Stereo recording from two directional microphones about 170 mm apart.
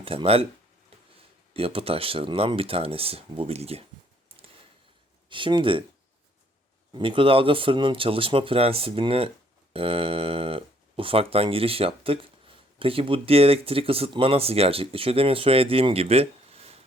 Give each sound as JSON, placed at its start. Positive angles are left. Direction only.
{"t": 0.0, "sound": "speech", "side_deg": -35}
{"t": 1.5, "sound": "speech", "side_deg": -35}
{"t": 5.3, "sound": "speech", "side_deg": -30}
{"t": 6.9, "sound": "speech", "side_deg": -30}